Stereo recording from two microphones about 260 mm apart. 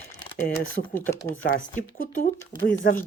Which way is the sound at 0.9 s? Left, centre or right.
Centre.